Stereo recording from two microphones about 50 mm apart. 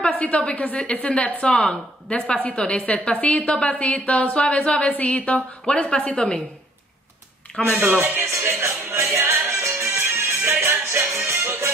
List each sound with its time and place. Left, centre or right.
0.2 s a woman's voice: left
7.6 s speech: centre
7.9 s music: right
8.5 s music: right
9.6 s music: right
9.8 s music: right